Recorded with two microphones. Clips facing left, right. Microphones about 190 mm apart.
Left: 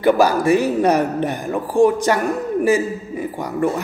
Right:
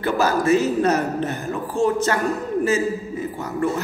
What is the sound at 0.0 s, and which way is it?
A man's voice, 15° left (ahead or behind).